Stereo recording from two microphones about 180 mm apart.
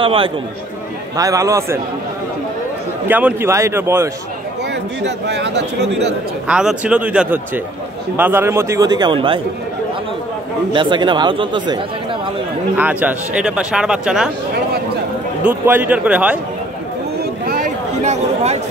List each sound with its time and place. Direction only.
0.0 s speech: 30° right (ahead or behind)
1.1 s a man's voice: 20° right (ahead or behind)
3.1 s a man's voice: 10° right (ahead or behind)
5.0 s speech: 70° right (ahead or behind)
6.4 s a man's voice: 5° right (ahead or behind); by 9.4 s 30° right (ahead or behind)
10.7 s speech: 25° right (ahead or behind)
12.7 s speech: 10° right (ahead or behind)
15.4 s a man's voice: 10° right (ahead or behind)
17.2 s a sound: 50° right (ahead or behind)